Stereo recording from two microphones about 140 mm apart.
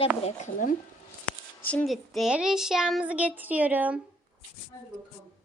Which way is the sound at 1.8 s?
Centre (ahead or behind).